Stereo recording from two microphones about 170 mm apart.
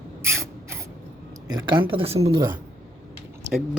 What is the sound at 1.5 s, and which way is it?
Speech, 30° right (ahead or behind).